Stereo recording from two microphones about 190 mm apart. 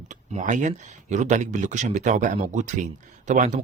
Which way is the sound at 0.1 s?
40° right (ahead or behind).